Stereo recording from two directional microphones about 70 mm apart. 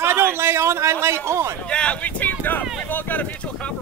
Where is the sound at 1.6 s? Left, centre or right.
Centre.